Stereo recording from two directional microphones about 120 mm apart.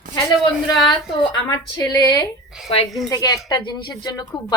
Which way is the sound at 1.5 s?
30° left (ahead or behind).